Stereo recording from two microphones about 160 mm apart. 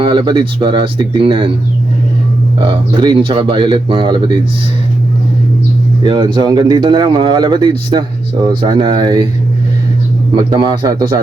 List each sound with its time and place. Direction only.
0.0 s speech: 30° right (ahead or behind)
2.6 s speech: 30° right (ahead or behind)
6.0 s speech: 25° right (ahead or behind)
10.5 s speech: 25° right (ahead or behind)